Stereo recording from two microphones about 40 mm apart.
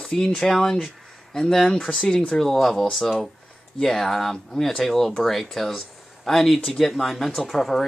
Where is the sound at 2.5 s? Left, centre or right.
Centre.